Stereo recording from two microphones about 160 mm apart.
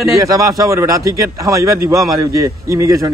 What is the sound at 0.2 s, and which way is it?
A man's voice, 20° right (ahead or behind).